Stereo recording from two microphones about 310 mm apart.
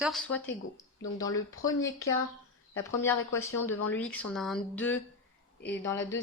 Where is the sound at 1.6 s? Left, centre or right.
Left.